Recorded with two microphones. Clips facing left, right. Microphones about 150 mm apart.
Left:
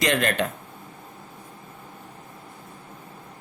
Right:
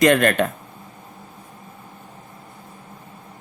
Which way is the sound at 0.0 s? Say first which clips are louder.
Right 7 dB; 55° right (ahead or behind).